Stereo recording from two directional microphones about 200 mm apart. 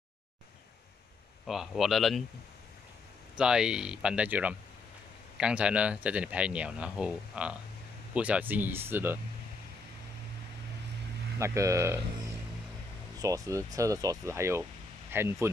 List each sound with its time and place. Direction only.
1.4 s speech: centre (ahead or behind)
3.3 s speech: 5° right (ahead or behind)
11.3 s speech: 15° right (ahead or behind)
13.2 s speech: 15° right (ahead or behind)